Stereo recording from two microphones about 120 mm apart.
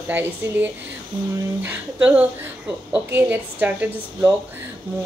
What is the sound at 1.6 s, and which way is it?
A woman's voice, 10° right (ahead or behind).